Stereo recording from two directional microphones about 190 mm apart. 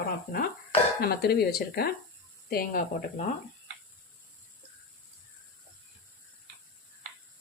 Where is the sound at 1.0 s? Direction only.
55° left (ahead or behind).